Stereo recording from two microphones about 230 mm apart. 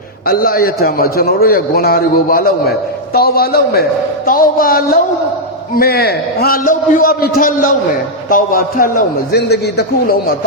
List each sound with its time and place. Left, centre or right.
0.3 s a man's voice: left